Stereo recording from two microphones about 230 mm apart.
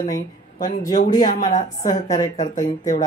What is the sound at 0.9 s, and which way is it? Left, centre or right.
Speech, left.